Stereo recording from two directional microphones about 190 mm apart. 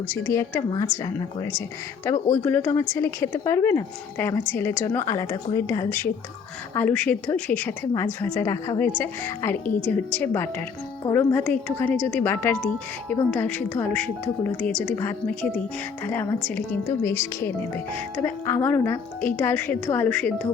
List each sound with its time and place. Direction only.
0.3 s a woman's voice: 15° left (ahead or behind)